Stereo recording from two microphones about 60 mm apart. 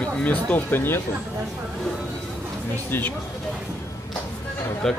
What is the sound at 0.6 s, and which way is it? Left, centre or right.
Speech, left.